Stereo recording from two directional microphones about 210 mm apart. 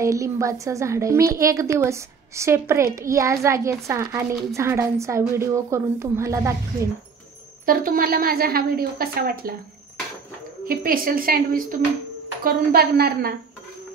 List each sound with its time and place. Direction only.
0.0 s a woman's voice: 15° right (ahead or behind)
7.6 s a woman's voice: 45° right (ahead or behind)
10.7 s a woman's voice: 45° right (ahead or behind)